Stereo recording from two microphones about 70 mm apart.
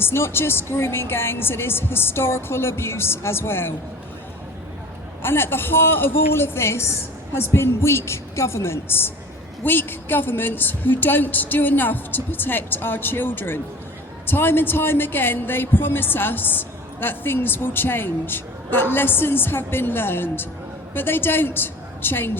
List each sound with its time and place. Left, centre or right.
0.0 s a woman's voice: left
5.2 s a woman's voice: left